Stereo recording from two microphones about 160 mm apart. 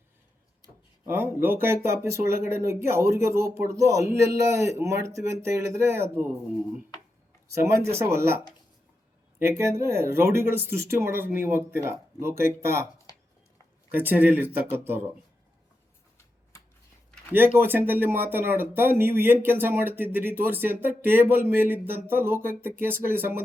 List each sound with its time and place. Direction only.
0.6 s speech: 15° right (ahead or behind)
7.5 s speech: 20° right (ahead or behind)
9.4 s speech: 15° right (ahead or behind)
13.9 s speech: 10° right (ahead or behind)
17.6 s speech: 15° right (ahead or behind)